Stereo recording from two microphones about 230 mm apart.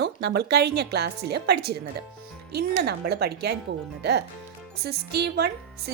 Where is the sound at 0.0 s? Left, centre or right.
Right.